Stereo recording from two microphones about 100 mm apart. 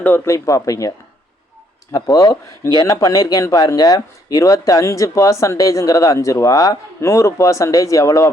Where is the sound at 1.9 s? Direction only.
30° left (ahead or behind).